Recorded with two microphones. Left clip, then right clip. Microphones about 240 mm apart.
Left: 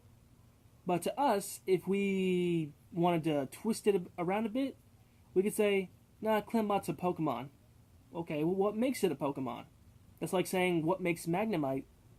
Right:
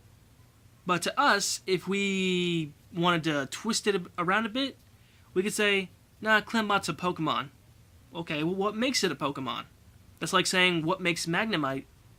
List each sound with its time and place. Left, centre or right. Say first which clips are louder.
0.9 s speech: right 6 dB; right